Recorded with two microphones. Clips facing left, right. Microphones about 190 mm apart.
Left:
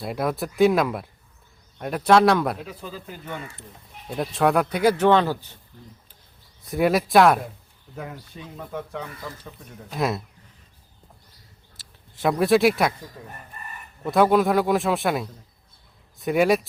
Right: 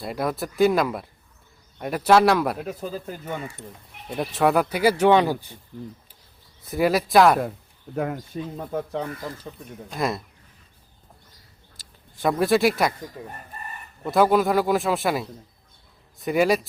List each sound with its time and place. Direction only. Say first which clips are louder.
0.0 s speech: left 1 dB; centre (ahead or behind)
2.6 s speech: right 6 dB; 45° right (ahead or behind)
4.1 s speech: even; centre (ahead or behind)
6.7 s speech: left 1 dB; centre (ahead or behind)
7.9 s speech: right 9 dB; 55° right (ahead or behind)
8.5 s speech: right 3 dB; 35° right (ahead or behind)
9.9 s speech: left 1 dB; 5° left (ahead or behind)
11.8 s speech: left 1 dB; centre (ahead or behind)
13.2 s speech: right 4 dB; 15° right (ahead or behind)
14.0 s speech: left 1 dB; centre (ahead or behind)